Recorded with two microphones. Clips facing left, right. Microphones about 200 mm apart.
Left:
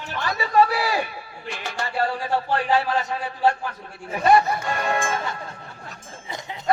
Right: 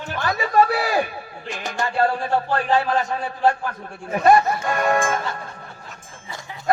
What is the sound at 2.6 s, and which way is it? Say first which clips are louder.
A man's voice: right 1 dB; 50° right (ahead or behind).